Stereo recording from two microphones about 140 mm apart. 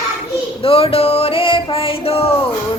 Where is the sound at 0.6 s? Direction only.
40° left (ahead or behind).